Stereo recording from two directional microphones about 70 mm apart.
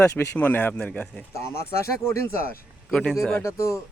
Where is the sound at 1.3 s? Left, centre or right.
Left.